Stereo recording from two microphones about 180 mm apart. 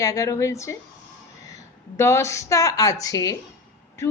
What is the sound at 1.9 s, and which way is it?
A woman's voice, 15° left (ahead or behind).